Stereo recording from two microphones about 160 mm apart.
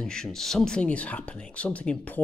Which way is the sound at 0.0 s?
5° left (ahead or behind).